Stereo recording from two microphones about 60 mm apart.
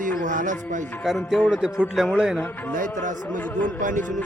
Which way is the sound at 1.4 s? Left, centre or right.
Centre.